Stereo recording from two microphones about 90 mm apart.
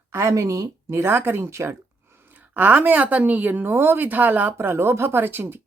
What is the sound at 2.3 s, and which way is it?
A woman's voice, 20° right (ahead or behind).